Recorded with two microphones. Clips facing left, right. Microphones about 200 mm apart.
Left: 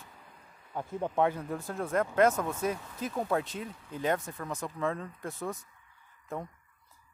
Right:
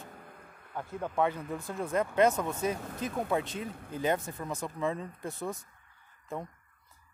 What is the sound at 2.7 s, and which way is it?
Speech, 50° right (ahead or behind).